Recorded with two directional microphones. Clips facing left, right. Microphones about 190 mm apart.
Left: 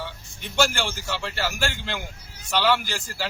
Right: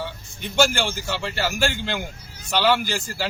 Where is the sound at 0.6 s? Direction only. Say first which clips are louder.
Right 3 dB; 5° right (ahead or behind).